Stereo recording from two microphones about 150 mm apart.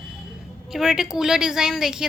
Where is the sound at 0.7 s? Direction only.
Centre (ahead or behind).